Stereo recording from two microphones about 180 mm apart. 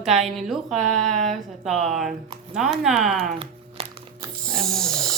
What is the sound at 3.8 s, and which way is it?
Music, 30° right (ahead or behind).